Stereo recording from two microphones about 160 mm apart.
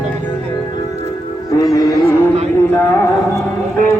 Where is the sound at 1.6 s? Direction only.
20° left (ahead or behind).